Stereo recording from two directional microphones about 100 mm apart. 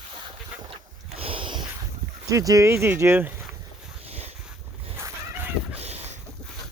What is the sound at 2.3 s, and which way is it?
Speech, 35° right (ahead or behind).